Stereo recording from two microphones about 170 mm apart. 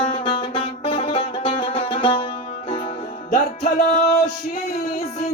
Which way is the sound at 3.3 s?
45° left (ahead or behind).